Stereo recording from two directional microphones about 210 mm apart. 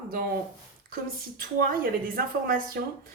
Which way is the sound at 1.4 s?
45° right (ahead or behind).